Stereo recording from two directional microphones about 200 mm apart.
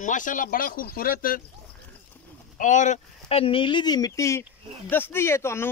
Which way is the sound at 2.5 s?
40° left (ahead or behind).